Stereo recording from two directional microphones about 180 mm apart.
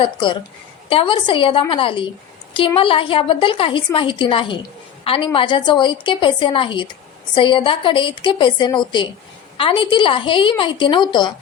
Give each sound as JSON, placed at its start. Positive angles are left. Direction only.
{"t": 0.0, "sound": "a woman's voice", "side_deg": 25}